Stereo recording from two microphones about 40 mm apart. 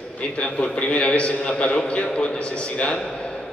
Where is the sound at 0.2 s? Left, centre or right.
Left.